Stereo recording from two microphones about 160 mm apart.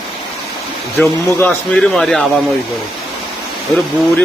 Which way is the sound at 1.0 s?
10° left (ahead or behind).